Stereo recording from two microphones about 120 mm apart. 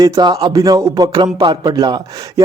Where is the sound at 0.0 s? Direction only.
40° right (ahead or behind).